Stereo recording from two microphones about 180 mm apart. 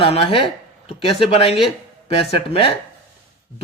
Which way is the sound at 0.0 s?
30° left (ahead or behind).